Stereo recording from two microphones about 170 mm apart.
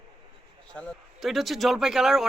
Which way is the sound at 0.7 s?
Centre (ahead or behind).